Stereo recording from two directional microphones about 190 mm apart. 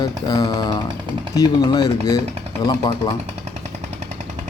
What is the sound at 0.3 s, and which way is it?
Speech, 20° left (ahead or behind).